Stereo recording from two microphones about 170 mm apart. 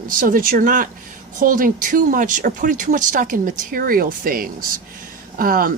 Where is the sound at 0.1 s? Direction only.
55° right (ahead or behind).